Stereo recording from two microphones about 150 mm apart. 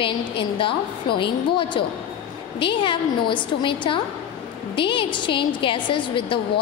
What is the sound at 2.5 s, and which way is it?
A woman's voice, 35° left (ahead or behind).